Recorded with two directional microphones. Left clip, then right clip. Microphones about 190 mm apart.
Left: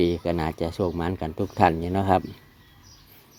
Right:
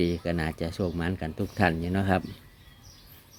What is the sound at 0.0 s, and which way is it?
Speech, 5° left (ahead or behind).